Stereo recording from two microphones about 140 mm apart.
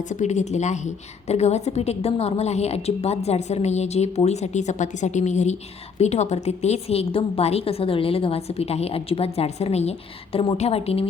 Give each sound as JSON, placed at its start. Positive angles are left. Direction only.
{"t": 0.1, "sound": "a woman's voice", "side_deg": 55}